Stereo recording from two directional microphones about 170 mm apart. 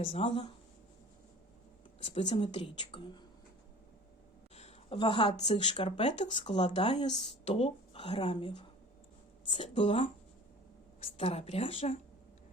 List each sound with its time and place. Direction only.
0.0 s a woman's voice: 35° left (ahead or behind)
2.3 s a woman's voice: 30° left (ahead or behind)
4.5 s speech: 35° left (ahead or behind)
6.0 s a woman's voice: 40° left (ahead or behind)
6.3 s a woman's voice: 25° left (ahead or behind)